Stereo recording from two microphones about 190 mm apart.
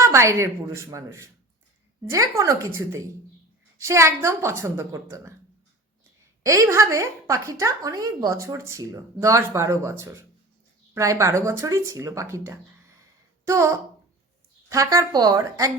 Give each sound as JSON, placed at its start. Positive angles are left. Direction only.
{"t": 0.0, "sound": "speech", "side_deg": -15}
{"t": 6.4, "sound": "speech", "side_deg": -15}